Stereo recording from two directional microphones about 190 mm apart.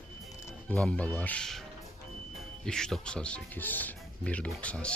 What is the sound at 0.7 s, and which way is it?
Speech, 5° left (ahead or behind).